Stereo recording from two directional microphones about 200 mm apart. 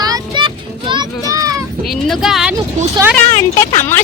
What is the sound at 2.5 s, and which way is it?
Speech, 15° right (ahead or behind).